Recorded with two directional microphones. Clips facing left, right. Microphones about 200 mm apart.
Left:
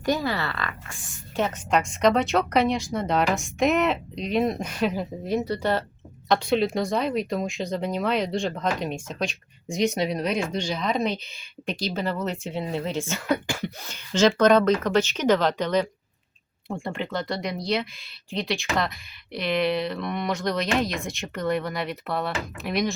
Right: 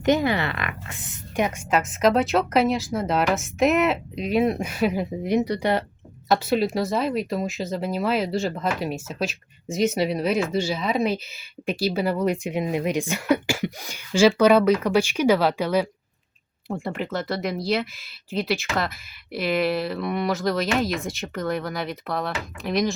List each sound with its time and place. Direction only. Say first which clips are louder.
0.0 s speech: right 5 dB; 20° right (ahead or behind)
6.2 s speech: right 1 dB; 5° right (ahead or behind)